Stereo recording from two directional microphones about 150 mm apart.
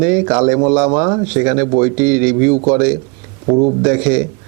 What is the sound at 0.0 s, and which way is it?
Speech, 15° right (ahead or behind).